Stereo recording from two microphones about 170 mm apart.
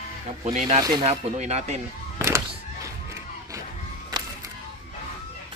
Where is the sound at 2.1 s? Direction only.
15° right (ahead or behind).